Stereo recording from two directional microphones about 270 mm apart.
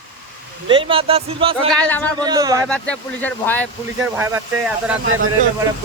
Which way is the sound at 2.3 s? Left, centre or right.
Centre.